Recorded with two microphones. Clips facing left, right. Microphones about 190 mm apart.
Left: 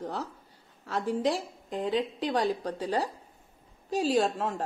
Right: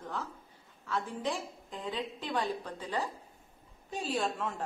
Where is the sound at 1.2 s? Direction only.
35° left (ahead or behind).